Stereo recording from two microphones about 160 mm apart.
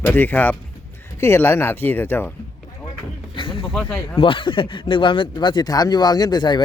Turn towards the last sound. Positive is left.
turn(degrees=30)  # may be behind; listen again after turning